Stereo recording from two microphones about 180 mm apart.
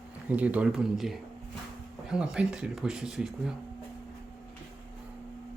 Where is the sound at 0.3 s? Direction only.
10° right (ahead or behind).